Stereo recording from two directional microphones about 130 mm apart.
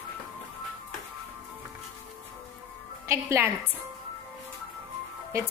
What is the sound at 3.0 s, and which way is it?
Speech, 20° right (ahead or behind).